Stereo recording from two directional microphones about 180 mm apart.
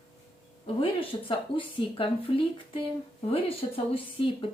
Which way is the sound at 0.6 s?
30° left (ahead or behind).